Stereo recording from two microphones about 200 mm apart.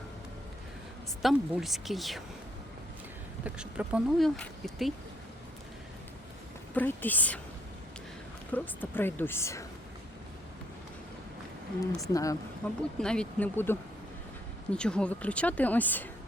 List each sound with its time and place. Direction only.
1.2 s speech: centre (ahead or behind)
3.4 s speech: 5° right (ahead or behind)
6.7 s speech: 10° left (ahead or behind)
8.5 s speech: 10° left (ahead or behind)
11.9 s speech: 15° left (ahead or behind)
13.0 s speech: 5° left (ahead or behind)